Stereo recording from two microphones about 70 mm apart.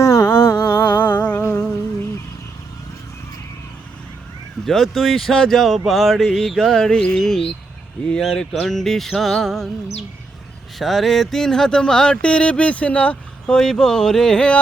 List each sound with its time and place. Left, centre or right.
0.0 s humming: left
4.6 s speech: centre
10.8 s speech: centre